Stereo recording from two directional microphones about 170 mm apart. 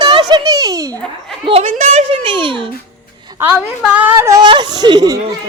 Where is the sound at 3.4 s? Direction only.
10° right (ahead or behind); by 5.2 s 25° right (ahead or behind).